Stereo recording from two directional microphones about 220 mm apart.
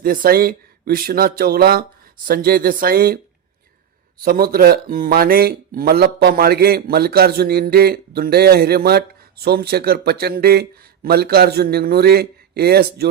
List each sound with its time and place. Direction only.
0.0 s speech: 40° right (ahead or behind)
4.2 s speech: 40° right (ahead or behind)